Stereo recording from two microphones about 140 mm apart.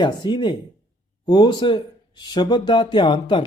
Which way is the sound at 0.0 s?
30° left (ahead or behind).